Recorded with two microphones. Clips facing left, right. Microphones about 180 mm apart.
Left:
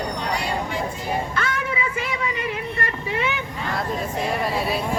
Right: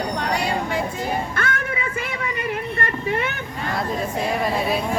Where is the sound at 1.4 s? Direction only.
55° right (ahead or behind).